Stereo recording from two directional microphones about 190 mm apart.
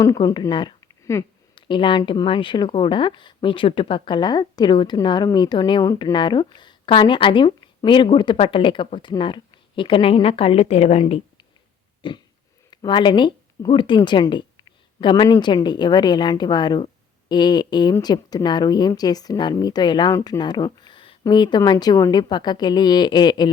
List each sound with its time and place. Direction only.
0.0 s speech: 20° left (ahead or behind)